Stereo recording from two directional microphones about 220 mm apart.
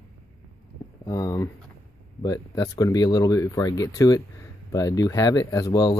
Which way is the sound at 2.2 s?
15° left (ahead or behind).